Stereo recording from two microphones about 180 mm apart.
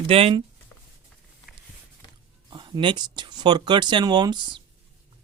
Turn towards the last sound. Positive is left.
turn(degrees=-25)  # may be behind; listen again after turning